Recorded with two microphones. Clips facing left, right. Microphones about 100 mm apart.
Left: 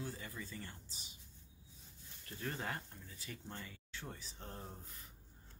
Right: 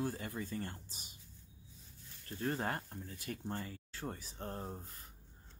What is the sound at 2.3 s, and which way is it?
Speech, 35° right (ahead or behind).